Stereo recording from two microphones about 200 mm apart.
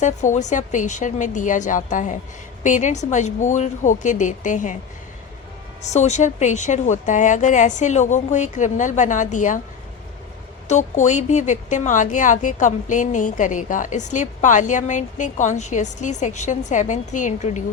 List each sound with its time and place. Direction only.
0.0 s a woman's voice: 35° left (ahead or behind)
5.9 s a woman's voice: 35° left (ahead or behind)
10.7 s a woman's voice: 35° left (ahead or behind)